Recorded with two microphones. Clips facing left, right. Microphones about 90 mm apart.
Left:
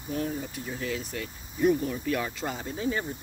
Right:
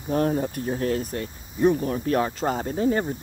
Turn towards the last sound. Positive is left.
turn(degrees=-40)  # may be behind; listen again after turning